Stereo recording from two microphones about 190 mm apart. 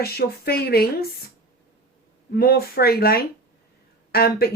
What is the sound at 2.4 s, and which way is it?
Speech, 55° left (ahead or behind).